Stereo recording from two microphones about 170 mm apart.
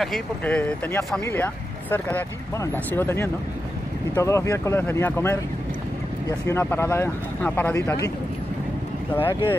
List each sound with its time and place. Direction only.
0.0 s speech: 5° left (ahead or behind)
9.1 s speech: 10° left (ahead or behind)